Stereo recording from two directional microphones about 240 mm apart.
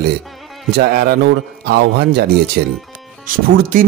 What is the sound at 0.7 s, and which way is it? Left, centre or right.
A man's voice, right.